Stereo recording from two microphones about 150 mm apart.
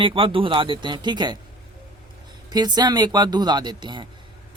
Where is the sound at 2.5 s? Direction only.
25° right (ahead or behind).